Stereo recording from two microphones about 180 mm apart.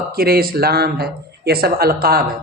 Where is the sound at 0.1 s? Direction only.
55° right (ahead or behind).